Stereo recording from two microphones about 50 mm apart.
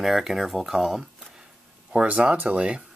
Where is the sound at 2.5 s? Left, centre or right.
Right.